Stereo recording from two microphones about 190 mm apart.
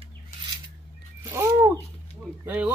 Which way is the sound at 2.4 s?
10° right (ahead or behind).